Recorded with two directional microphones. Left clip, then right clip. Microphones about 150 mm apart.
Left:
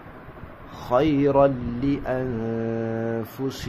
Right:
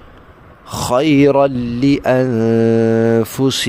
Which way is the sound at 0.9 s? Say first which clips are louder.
Right 8 dB; 90° right.